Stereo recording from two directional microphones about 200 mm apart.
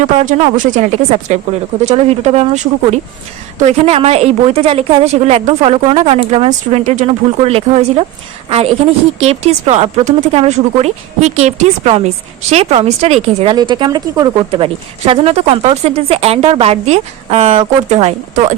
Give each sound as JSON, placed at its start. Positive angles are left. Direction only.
{"t": 0.2, "sound": "a woman's voice", "side_deg": -40}